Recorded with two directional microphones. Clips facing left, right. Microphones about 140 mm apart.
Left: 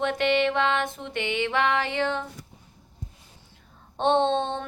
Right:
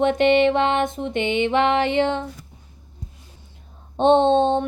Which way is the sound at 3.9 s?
20° right (ahead or behind).